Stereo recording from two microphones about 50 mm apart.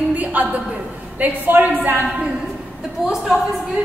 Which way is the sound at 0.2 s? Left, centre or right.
Right.